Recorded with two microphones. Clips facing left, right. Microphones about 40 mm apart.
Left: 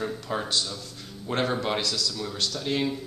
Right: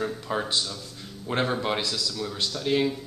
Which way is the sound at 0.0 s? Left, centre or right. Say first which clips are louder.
Right 1 dB; centre.